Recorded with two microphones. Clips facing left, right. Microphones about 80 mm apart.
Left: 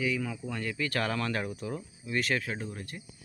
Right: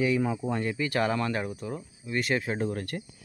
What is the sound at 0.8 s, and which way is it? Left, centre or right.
Speech, centre.